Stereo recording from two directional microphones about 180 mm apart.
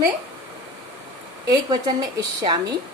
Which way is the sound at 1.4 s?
20° right (ahead or behind).